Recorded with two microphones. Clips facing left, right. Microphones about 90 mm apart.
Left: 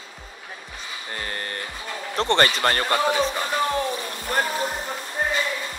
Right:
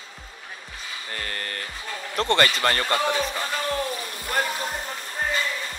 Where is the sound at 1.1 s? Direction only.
25° left (ahead or behind).